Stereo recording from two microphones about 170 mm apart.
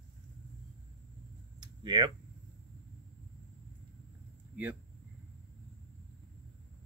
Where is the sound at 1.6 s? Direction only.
25° right (ahead or behind).